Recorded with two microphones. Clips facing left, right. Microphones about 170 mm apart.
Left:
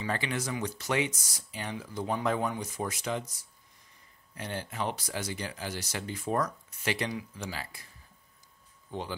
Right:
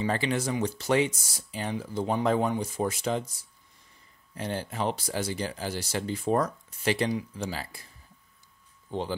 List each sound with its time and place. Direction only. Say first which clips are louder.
0.0 s speech: right 5 dB; 30° right (ahead or behind)